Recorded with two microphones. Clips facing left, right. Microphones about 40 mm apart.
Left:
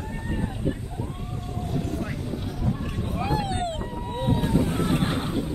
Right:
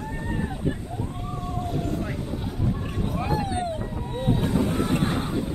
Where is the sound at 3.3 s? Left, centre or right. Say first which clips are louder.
Even; left.